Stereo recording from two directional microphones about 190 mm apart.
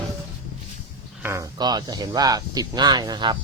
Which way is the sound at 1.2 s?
15° right (ahead or behind).